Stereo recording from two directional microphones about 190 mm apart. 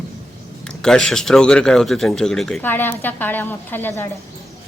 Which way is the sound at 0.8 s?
5° left (ahead or behind).